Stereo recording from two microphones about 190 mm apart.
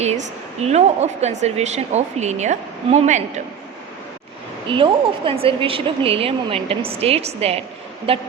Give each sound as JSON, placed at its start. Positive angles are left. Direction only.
{"t": 0.0, "sound": "a woman's voice", "side_deg": -35}
{"t": 4.7, "sound": "a woman's voice", "side_deg": -30}